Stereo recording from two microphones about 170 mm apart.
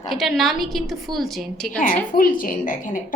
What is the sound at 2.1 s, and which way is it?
A woman's voice, 55° left (ahead or behind).